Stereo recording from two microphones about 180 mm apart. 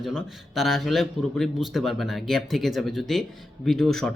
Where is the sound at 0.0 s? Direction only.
Centre (ahead or behind).